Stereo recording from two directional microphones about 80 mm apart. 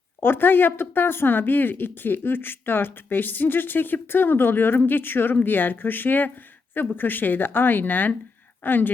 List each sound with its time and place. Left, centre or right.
0.2 s speech: left